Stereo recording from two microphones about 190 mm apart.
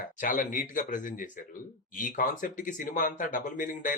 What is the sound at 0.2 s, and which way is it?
Speech, 45° left (ahead or behind).